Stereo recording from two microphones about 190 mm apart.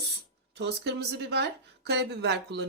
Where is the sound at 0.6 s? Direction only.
60° right (ahead or behind).